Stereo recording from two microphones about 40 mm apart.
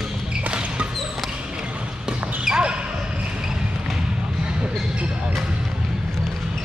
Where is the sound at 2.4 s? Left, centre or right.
Right.